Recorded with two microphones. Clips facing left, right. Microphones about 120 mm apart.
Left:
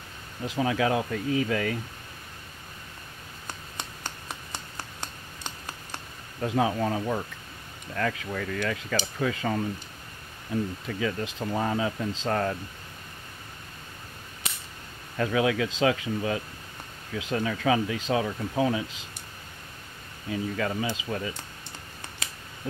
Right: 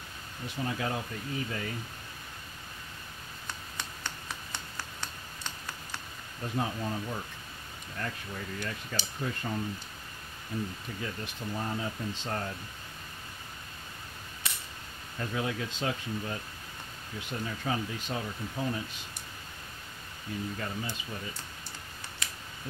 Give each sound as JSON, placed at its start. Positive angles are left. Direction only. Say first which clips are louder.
{"t": 0.5, "sound": "speech", "louder": "left 8 dB", "side_deg": 90}
{"t": 6.4, "sound": "speech", "louder": "left 8 dB", "side_deg": 90}
{"t": 11.0, "sound": "speech", "louder": "left 10 dB", "side_deg": 90}
{"t": 15.1, "sound": "speech", "louder": "left 9 dB", "side_deg": 90}
{"t": 20.2, "sound": "speech", "louder": "left 7 dB", "side_deg": 90}